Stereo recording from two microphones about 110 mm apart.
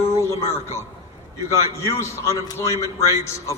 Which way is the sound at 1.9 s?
30° left (ahead or behind).